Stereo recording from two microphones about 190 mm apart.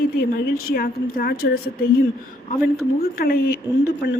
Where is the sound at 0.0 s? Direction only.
50° left (ahead or behind).